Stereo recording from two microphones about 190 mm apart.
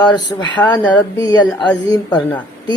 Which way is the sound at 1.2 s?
20° left (ahead or behind).